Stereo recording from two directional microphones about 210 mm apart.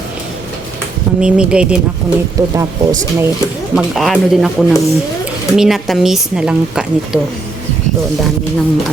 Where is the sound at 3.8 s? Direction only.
Centre (ahead or behind).